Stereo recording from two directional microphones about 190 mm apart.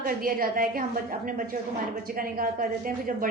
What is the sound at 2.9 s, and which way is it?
Speech, 45° right (ahead or behind).